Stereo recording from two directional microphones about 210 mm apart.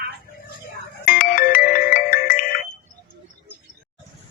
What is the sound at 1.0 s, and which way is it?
Music, 40° left (ahead or behind).